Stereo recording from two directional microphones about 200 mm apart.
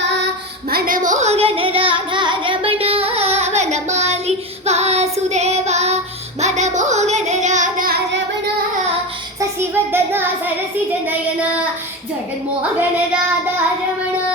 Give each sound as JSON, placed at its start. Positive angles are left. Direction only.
{"t": 0.7, "sound": "singing", "side_deg": -45}
{"t": 9.4, "sound": "child singing", "side_deg": -10}